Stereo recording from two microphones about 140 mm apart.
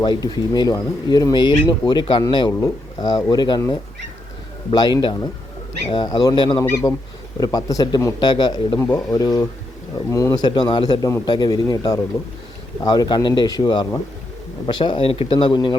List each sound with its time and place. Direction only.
0.0 s speech: 30° left (ahead or behind)
2.5 s speech: 20° left (ahead or behind)
4.7 s speech: 30° left (ahead or behind)
8.8 s speech: 20° left (ahead or behind)